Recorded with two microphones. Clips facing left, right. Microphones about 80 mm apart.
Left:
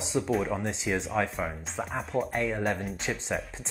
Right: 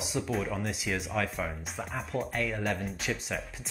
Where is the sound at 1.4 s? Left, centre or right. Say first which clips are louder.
Left 3 dB; centre.